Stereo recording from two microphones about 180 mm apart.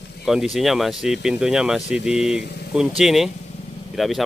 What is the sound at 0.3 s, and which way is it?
Speech, centre (ahead or behind).